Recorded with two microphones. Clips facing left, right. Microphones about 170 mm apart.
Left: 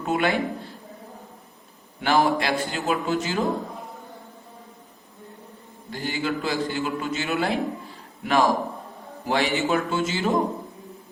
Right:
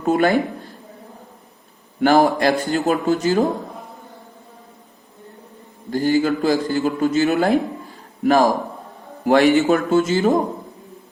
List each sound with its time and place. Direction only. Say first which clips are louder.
0.0 s a man's voice: right 6 dB; 40° right (ahead or behind)
2.0 s a man's voice: right 6 dB; 45° right (ahead or behind)
5.9 s a man's voice: right 10 dB; 40° right (ahead or behind)
9.2 s a man's voice: right 10 dB; 50° right (ahead or behind)